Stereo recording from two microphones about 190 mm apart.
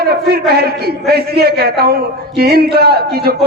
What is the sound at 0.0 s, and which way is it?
A man's voice, 55° right (ahead or behind).